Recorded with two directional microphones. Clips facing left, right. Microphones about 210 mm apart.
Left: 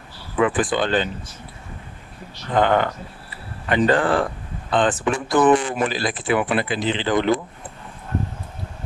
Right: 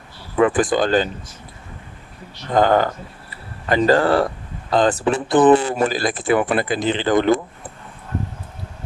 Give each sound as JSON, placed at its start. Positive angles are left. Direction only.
{"t": 0.3, "sound": "speech", "side_deg": -40}
{"t": 2.5, "sound": "speech", "side_deg": -40}